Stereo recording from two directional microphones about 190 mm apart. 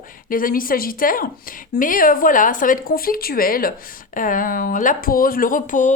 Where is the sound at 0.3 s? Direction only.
45° left (ahead or behind).